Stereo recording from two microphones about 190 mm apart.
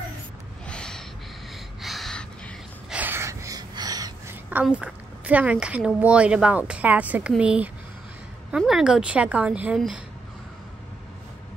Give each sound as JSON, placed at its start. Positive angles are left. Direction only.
{"t": 0.7, "sound": "gasp", "side_deg": 5}
{"t": 3.0, "sound": "gasp", "side_deg": -10}
{"t": 4.5, "sound": "a woman's voice", "side_deg": -10}